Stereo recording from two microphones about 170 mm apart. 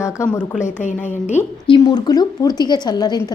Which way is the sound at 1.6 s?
25° left (ahead or behind).